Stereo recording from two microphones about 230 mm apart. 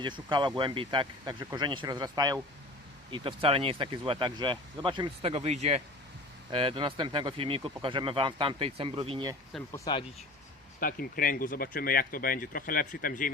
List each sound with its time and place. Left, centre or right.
0.0 s speech: centre
9.7 s speech: centre
10.8 s speech: left